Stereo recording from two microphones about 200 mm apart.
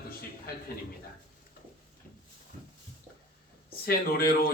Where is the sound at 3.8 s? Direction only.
50° left (ahead or behind).